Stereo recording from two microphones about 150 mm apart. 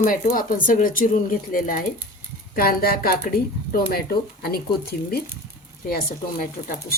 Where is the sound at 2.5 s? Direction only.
80° left.